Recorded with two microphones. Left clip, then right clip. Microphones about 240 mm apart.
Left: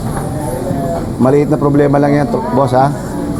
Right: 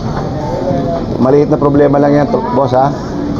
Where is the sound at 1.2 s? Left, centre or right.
Left.